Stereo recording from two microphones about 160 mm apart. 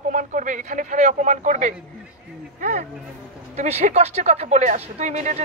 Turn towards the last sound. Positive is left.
turn(degrees=-45)  # may be behind; listen again after turning